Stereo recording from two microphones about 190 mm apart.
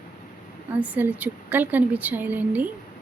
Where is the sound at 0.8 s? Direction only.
10° right (ahead or behind).